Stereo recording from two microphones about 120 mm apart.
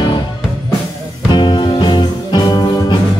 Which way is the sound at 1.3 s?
40° left (ahead or behind).